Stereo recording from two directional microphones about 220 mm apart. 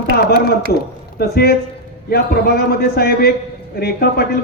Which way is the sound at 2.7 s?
45° left (ahead or behind).